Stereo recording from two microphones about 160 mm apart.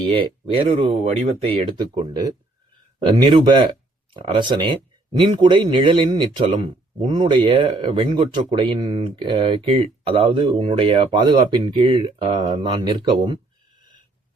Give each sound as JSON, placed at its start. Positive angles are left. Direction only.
{"t": 0.0, "sound": "speech", "side_deg": -30}